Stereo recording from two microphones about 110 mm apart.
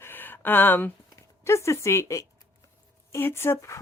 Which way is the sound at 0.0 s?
20° left (ahead or behind).